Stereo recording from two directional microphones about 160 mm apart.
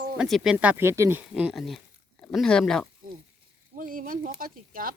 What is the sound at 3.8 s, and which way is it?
Speech, 60° right (ahead or behind).